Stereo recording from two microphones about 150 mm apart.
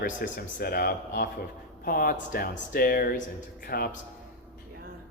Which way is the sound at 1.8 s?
75° left (ahead or behind).